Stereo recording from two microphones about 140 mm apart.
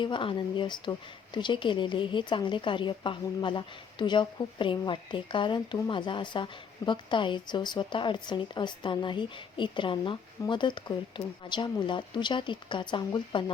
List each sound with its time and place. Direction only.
0.0 s speech: 35° left (ahead or behind)